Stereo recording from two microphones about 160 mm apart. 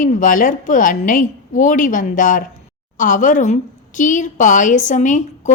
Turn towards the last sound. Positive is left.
turn(degrees=50)  # may be behind; listen again after turning